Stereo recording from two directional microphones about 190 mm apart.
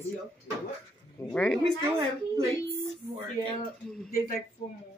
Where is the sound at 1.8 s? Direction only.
25° right (ahead or behind).